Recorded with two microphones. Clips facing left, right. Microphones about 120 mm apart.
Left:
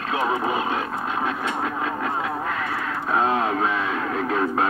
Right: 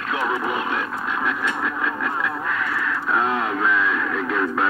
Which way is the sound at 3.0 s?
30° left (ahead or behind).